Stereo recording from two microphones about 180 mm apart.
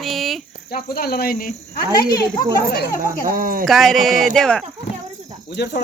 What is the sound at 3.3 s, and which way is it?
Speech, 50° right (ahead or behind).